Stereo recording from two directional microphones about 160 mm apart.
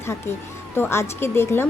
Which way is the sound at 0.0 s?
15° left (ahead or behind).